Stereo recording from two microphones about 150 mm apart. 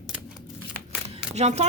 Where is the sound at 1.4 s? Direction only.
50° right (ahead or behind).